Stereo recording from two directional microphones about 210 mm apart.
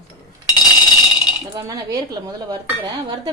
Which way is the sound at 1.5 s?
15° right (ahead or behind).